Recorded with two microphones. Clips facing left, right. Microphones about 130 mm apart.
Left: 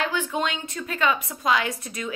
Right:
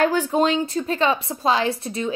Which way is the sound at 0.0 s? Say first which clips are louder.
Right 7 dB; 40° right (ahead or behind).